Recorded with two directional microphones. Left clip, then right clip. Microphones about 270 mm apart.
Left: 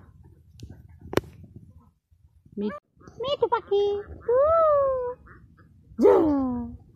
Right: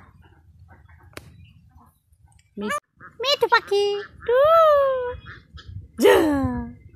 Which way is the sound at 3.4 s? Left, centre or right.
Centre.